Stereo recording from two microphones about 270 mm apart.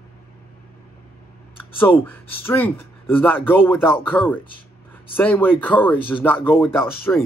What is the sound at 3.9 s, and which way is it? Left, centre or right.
Speech, centre.